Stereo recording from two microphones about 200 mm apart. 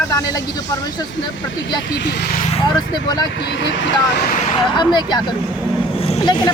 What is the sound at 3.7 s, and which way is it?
Speech, 60° left (ahead or behind).